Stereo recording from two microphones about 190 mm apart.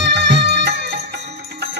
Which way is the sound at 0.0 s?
65° right (ahead or behind).